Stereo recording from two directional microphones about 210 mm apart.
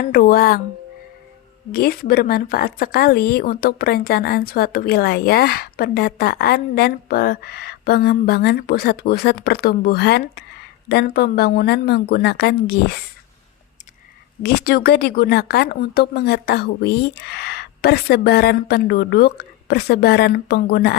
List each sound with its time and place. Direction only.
0.0 s speech: 40° left (ahead or behind)
1.7 s speech: 45° left (ahead or behind)
14.4 s speech: 45° left (ahead or behind)